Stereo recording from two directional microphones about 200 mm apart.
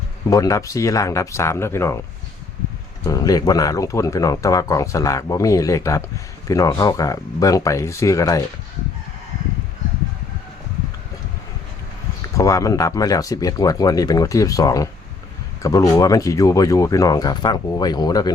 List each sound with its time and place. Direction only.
0.3 s speech: 15° left (ahead or behind)
3.0 s speech: 15° left (ahead or behind)
12.2 s speech: 15° left (ahead or behind)